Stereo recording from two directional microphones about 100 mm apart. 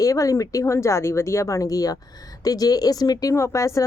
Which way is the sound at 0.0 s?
35° left (ahead or behind).